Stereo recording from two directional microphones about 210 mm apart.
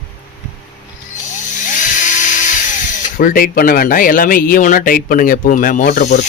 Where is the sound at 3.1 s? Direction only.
40° left (ahead or behind).